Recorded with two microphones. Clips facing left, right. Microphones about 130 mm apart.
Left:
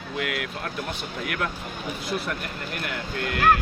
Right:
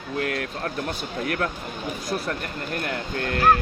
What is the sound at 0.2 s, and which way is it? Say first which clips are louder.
Speech: right 2 dB; 40° right (ahead or behind).